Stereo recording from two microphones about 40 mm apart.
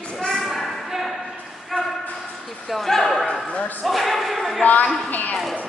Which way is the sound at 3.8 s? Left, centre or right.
Centre.